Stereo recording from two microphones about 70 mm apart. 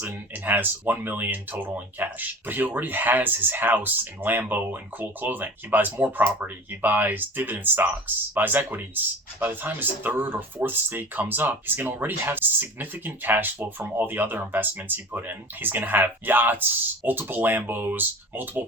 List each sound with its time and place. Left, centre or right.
0.1 s speech: right